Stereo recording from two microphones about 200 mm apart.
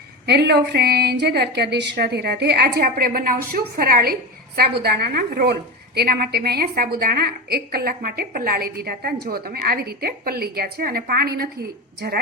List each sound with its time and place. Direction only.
0.3 s a woman's voice: 55° right (ahead or behind)